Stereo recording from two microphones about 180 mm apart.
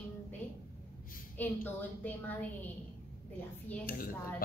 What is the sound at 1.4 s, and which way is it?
Speech, 10° left (ahead or behind).